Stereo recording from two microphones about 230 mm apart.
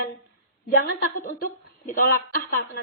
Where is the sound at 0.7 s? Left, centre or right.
Left.